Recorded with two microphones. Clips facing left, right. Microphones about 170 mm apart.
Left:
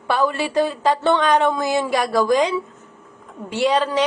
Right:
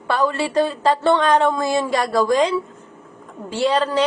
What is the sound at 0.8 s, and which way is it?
A woman's voice, centre (ahead or behind).